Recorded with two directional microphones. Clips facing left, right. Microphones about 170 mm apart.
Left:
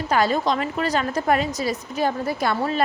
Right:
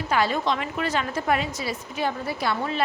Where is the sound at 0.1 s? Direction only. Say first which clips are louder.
Left 3 dB; 40° left (ahead or behind).